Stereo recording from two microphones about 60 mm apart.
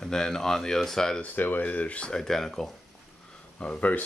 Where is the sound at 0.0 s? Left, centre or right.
Centre.